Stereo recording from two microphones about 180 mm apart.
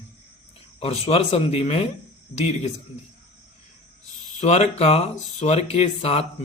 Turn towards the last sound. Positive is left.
turn(degrees=35)  # may be behind; listen again after turning